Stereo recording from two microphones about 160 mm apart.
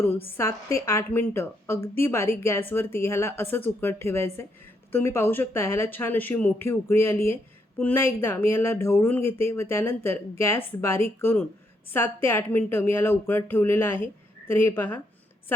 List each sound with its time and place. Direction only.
0.0 s a woman's voice: 15° left (ahead or behind)